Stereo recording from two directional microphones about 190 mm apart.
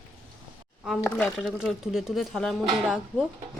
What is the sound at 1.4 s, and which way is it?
Speech, centre (ahead or behind).